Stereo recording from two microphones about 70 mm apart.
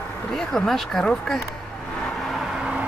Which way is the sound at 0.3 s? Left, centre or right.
Centre.